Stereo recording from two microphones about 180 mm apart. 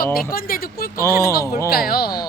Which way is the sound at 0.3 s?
55° left (ahead or behind).